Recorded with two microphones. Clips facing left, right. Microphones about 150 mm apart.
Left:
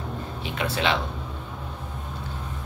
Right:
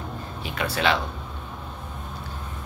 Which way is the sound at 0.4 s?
20° left (ahead or behind).